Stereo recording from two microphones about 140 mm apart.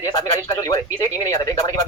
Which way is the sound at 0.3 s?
20° left (ahead or behind).